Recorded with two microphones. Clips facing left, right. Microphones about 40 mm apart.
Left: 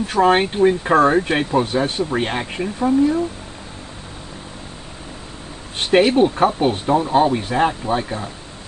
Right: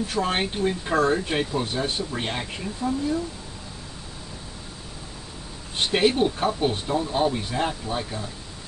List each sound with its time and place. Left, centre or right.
0.0 s speech: left
0.4 s speech: left
0.8 s speech: left
6.0 s speech: left
6.6 s speech: left